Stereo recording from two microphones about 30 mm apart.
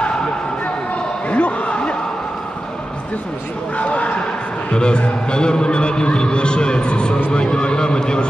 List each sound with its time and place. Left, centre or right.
1.3 s basketball bounce: left
3.7 s bow-wow: left
4.7 s a man's voice: left